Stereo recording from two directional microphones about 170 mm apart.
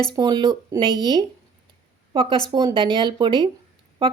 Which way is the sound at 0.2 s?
25° right (ahead or behind).